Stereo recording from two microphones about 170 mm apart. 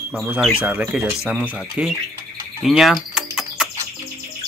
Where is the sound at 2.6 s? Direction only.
Centre (ahead or behind).